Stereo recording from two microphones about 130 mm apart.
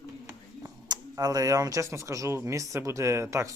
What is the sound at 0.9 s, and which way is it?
Speech, 30° right (ahead or behind).